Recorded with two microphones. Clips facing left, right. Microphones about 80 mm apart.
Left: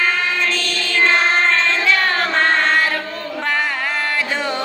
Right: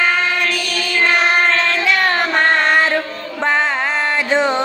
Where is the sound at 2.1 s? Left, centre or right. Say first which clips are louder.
Right 2 dB; centre.